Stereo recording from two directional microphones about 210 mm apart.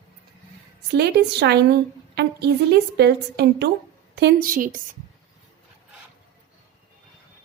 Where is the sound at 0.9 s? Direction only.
50° right (ahead or behind).